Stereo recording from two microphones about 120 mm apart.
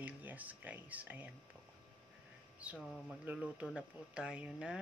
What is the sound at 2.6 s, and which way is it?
Speech, 10° right (ahead or behind).